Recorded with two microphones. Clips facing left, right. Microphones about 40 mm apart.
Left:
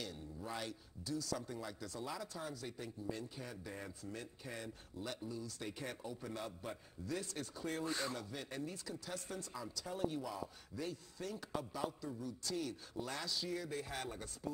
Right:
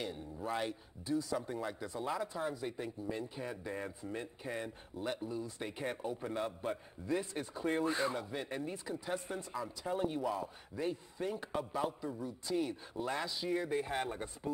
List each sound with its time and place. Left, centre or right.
0.6 s speech: right